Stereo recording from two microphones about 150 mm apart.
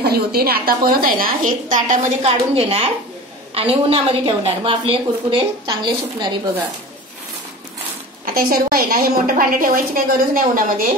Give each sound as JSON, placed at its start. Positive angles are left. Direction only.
{"t": 0.0, "sound": "a woman's voice", "side_deg": -90}
{"t": 8.4, "sound": "a woman's voice", "side_deg": -75}